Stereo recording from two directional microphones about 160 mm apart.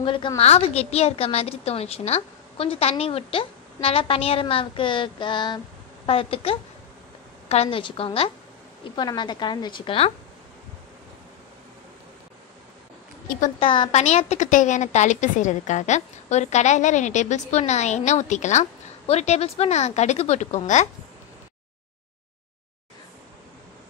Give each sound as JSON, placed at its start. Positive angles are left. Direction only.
{"t": 0.0, "sound": "a woman's voice", "side_deg": 30}
{"t": 13.6, "sound": "a woman's voice", "side_deg": 35}
{"t": 14.0, "sound": "a woman's voice", "side_deg": 45}